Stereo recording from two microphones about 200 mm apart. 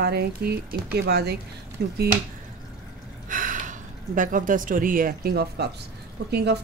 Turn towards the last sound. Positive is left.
turn(degrees=-55)  # may be behind; listen again after turning